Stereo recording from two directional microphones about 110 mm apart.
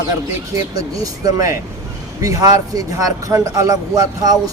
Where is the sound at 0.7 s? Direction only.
35° right (ahead or behind).